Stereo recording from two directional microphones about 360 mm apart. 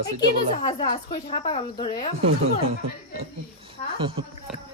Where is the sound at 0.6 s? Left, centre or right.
Centre.